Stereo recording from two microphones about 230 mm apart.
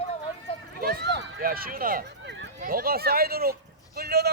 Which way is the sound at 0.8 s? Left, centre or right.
Right.